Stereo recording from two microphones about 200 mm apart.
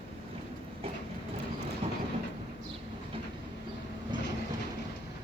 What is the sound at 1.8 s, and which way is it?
Train, 30° right (ahead or behind).